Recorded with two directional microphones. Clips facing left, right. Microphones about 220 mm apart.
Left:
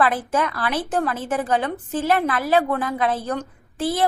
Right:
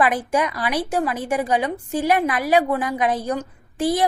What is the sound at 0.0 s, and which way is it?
A woman's voice, 15° right (ahead or behind).